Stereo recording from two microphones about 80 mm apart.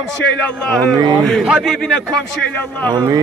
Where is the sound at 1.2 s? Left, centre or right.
Centre.